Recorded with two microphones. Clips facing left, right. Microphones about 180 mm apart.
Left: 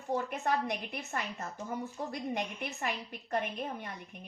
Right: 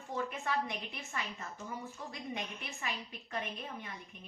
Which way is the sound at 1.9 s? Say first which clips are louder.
Left 6 dB; 55° left (ahead or behind).